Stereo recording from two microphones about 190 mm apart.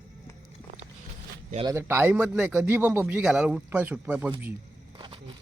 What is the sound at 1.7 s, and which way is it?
Speech, 15° right (ahead or behind).